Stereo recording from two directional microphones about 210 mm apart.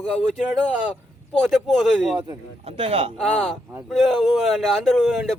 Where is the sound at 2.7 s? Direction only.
25° right (ahead or behind).